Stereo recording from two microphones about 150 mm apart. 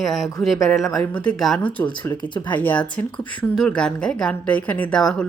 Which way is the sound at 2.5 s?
10° left (ahead or behind).